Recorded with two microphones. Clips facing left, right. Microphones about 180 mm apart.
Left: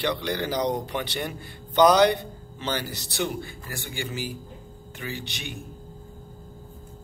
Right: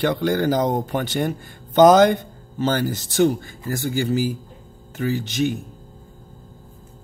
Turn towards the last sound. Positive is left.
turn(degrees=-40)  # may be behind; listen again after turning